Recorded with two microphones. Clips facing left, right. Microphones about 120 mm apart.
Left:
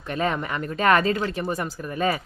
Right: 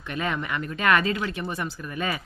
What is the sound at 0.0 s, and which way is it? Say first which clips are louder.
Speech: left 4 dB; 35° left (ahead or behind).